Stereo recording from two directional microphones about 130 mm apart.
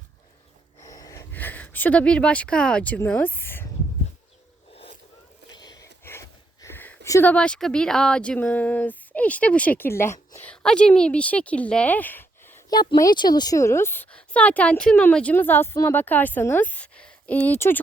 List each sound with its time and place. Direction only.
0.8 s a sound: 30° left (ahead or behind)
4.7 s vehicle: 50° left (ahead or behind)
5.5 s a sound: 30° left (ahead or behind)
6.1 s speech: 20° left (ahead or behind)
10.4 s a woman's voice: 5° left (ahead or behind)
12.7 s a woman's voice: 30° left (ahead or behind); by 17.7 s 15° left (ahead or behind)